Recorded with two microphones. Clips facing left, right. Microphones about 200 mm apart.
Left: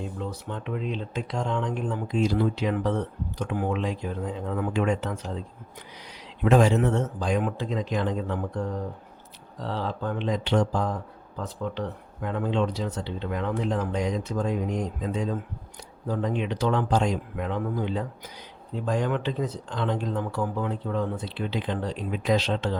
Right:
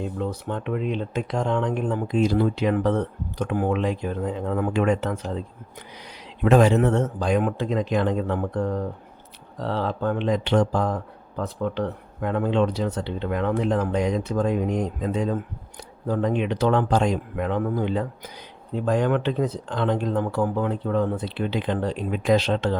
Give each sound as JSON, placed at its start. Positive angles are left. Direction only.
{"t": 0.2, "sound": "speech", "side_deg": -55}
{"t": 6.4, "sound": "speech", "side_deg": -60}